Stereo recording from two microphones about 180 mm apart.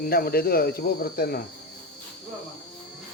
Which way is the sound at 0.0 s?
55° left (ahead or behind).